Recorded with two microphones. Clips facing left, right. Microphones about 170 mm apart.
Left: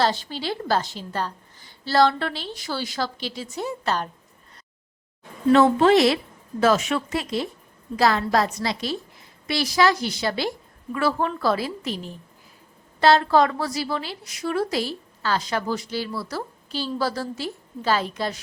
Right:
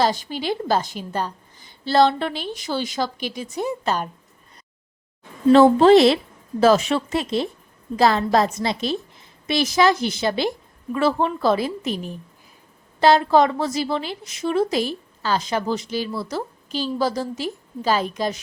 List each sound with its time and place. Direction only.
0.0 s a woman's voice: 15° right (ahead or behind)
5.5 s a woman's voice: 30° right (ahead or behind)
9.7 s a woman's voice: 20° right (ahead or behind)